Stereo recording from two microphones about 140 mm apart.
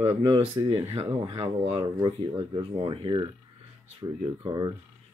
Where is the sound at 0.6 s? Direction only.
25° right (ahead or behind).